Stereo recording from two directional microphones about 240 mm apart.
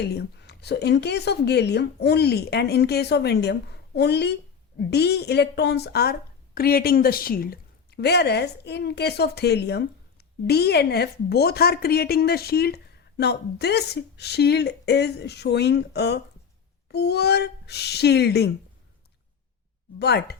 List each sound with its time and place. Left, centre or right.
0.0 s a woman's voice: left
20.0 s a woman's voice: left